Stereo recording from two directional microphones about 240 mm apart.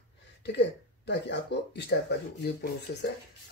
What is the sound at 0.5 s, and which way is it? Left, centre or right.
Speech, left.